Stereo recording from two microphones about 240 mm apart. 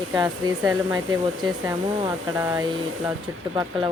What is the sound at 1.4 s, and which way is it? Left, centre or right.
Speech, centre.